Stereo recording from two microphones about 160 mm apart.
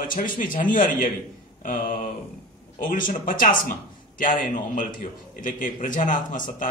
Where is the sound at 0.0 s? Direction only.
60° left (ahead or behind).